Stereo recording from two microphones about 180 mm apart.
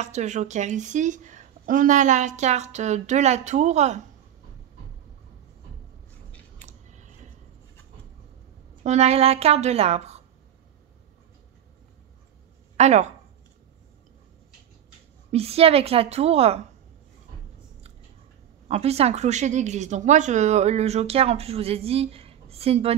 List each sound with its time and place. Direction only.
0.0 s a woman's voice: 40° right (ahead or behind)
6.6 s a sound: 40° right (ahead or behind)
8.8 s a woman's voice: 35° right (ahead or behind)
12.7 s speech: 40° right (ahead or behind)
15.3 s a woman's voice: 35° right (ahead or behind)
18.7 s a woman's voice: 35° right (ahead or behind)